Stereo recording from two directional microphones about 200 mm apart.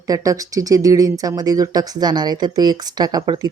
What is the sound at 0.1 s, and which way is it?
Speech, 15° right (ahead or behind).